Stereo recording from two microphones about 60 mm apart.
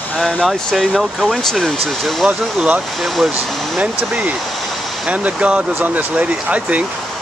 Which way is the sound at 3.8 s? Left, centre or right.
Right.